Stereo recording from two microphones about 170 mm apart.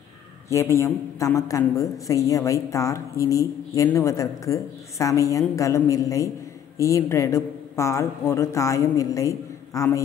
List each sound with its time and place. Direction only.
0.5 s a woman's voice: 20° left (ahead or behind)